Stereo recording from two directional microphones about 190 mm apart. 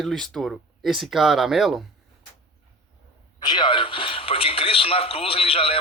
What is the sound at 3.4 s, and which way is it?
Speech, 25° left (ahead or behind).